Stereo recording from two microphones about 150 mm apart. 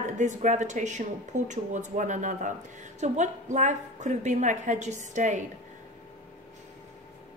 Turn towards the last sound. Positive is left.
turn(degrees=-55)  # may be behind; listen again after turning